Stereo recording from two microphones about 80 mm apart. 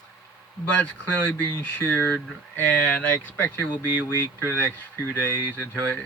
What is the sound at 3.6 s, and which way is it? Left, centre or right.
Speech, centre.